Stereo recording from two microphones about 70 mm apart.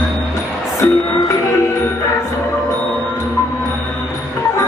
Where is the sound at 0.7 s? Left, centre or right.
Left.